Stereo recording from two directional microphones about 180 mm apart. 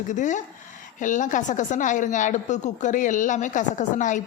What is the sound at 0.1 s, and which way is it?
Speech, 45° left (ahead or behind).